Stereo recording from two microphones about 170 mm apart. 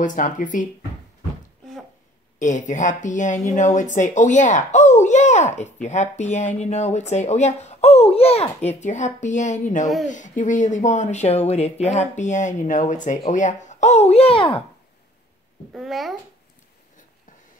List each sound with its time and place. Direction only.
0.0 s speech: 50° left (ahead or behind)
2.3 s speech: 45° left (ahead or behind); by 14.6 s 30° left (ahead or behind)
15.7 s a child's voice: centre (ahead or behind)